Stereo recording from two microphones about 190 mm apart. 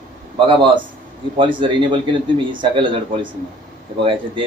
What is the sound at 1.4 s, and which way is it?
Speech, 25° right (ahead or behind).